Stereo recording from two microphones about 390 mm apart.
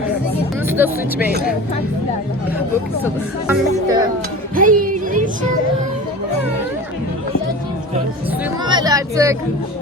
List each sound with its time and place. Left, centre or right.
0.7 s speech: centre
3.4 s speech: centre
4.5 s music: right
8.4 s music: centre